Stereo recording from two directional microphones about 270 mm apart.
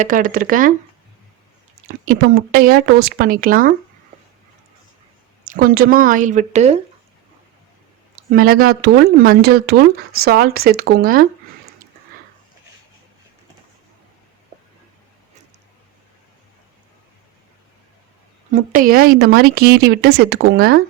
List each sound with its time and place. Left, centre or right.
0.0 s speech: right
1.9 s speech: right
5.5 s speech: right
8.1 s speech: right
18.5 s speech: right